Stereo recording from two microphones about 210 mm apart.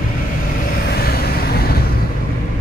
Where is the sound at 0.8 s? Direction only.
45° left (ahead or behind).